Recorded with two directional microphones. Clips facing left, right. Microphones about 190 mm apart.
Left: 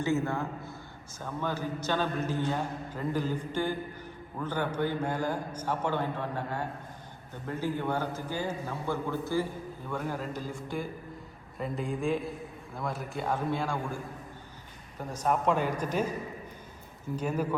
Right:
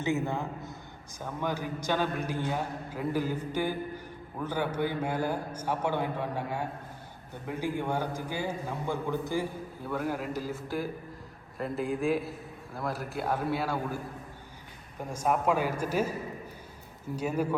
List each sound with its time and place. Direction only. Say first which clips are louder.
0.0 s a man's voice: left 1 dB; 15° right (ahead or behind)
15.1 s a man's voice: even; 10° right (ahead or behind)
17.2 s a man's voice: right 1 dB; 10° right (ahead or behind)